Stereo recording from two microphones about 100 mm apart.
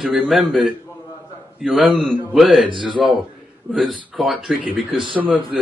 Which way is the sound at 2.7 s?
55° right (ahead or behind).